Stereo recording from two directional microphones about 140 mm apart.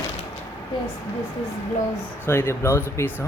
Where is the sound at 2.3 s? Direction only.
15° left (ahead or behind).